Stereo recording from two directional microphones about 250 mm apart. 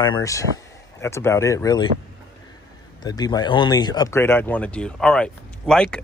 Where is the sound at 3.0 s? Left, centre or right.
Centre.